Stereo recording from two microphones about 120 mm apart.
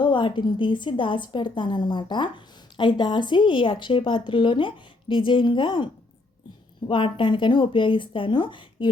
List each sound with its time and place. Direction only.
0.0 s a woman's voice: 40° left (ahead or behind)